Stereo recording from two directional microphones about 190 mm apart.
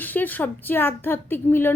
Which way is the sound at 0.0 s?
10° left (ahead or behind).